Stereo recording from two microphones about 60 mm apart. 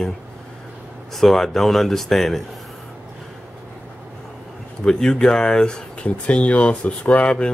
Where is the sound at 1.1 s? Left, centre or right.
Centre.